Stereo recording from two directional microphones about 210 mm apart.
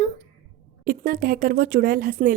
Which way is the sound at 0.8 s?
40° right (ahead or behind).